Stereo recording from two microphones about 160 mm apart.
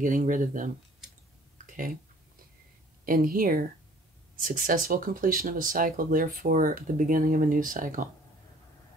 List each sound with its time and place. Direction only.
0.0 s speech: 55° right (ahead or behind)
3.1 s speech: 60° right (ahead or behind)